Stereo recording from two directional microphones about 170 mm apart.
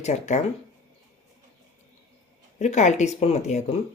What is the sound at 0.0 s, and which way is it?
Speech, 40° left (ahead or behind).